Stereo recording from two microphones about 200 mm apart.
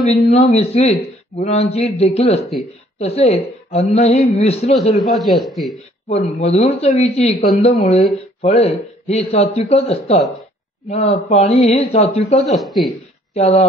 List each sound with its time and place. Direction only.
0.1 s a man's voice: 30° left (ahead or behind)
5.0 s a man's voice: centre (ahead or behind)
6.0 s a man's voice: 30° left (ahead or behind)
12.5 s a man's voice: centre (ahead or behind)
13.3 s a man's voice: 30° left (ahead or behind)